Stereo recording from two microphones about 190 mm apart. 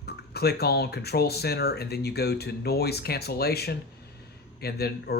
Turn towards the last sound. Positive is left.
turn(degrees=55)  # may be behind; listen again after turning